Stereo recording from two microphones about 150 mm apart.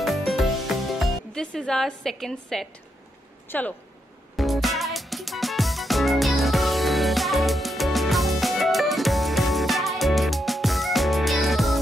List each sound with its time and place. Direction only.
0.0 s music: centre (ahead or behind)
3.4 s speech: 10° left (ahead or behind)
4.4 s music: centre (ahead or behind)